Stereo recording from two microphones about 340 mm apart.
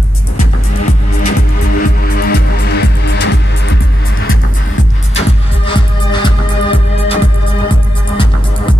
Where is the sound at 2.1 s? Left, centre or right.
Left.